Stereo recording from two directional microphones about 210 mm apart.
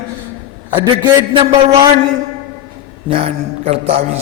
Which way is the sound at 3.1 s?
25° right (ahead or behind).